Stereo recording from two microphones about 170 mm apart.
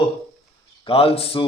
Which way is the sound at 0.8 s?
35° left (ahead or behind).